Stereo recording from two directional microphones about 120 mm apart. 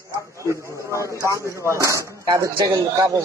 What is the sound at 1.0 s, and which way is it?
A man's voice, 25° right (ahead or behind).